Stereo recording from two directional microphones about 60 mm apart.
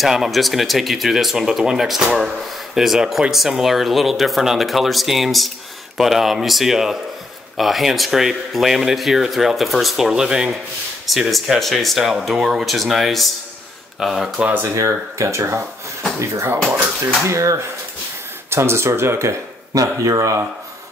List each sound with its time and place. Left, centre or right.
0.0 s speech: centre
11.1 s speech: centre
14.8 s speech: right
17.3 s speech: right
18.5 s speech: right
19.7 s speech: right